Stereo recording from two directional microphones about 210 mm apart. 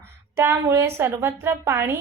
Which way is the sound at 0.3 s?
10° right (ahead or behind).